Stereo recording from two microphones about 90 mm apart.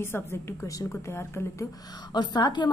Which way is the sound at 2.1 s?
55° left (ahead or behind).